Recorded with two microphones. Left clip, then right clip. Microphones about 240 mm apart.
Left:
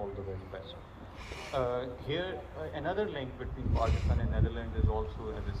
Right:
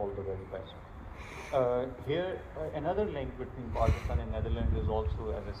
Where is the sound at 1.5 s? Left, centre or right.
Right.